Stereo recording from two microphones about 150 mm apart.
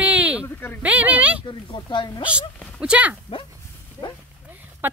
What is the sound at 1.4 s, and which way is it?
Speech, 35° left (ahead or behind).